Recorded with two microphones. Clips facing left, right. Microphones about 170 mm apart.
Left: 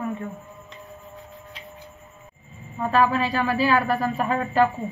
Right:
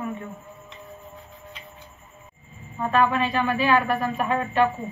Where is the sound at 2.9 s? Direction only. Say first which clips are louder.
Left 1 dB; 35° left (ahead or behind).